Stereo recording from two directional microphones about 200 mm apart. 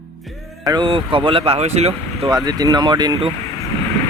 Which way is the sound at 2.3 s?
20° right (ahead or behind).